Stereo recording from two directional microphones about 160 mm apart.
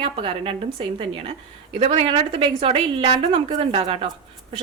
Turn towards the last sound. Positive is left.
turn(degrees=-35)  # may be behind; listen again after turning